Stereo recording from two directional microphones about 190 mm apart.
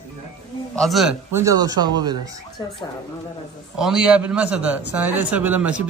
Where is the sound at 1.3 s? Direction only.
15° right (ahead or behind).